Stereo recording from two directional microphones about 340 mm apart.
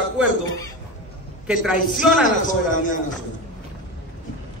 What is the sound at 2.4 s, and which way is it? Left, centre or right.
Speech, left.